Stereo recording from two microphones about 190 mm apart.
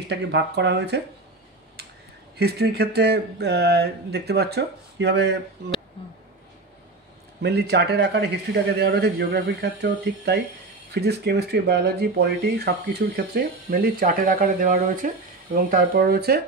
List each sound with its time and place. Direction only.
0.1 s speech: 65° right (ahead or behind)
2.3 s speech: 60° right (ahead or behind)
7.4 s speech: 60° right (ahead or behind)